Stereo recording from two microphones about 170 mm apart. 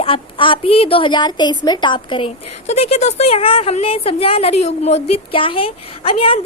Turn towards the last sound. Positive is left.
turn(degrees=30)  # may be behind; listen again after turning